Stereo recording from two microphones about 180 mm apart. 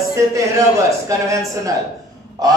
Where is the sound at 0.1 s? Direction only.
15° right (ahead or behind).